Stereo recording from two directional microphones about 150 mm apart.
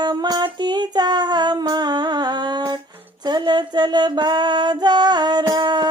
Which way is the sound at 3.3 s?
30° right (ahead or behind).